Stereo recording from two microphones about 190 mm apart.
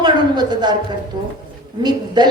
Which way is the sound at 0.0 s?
20° right (ahead or behind).